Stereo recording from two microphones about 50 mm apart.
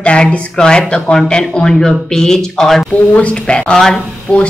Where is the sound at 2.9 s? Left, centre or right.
Left.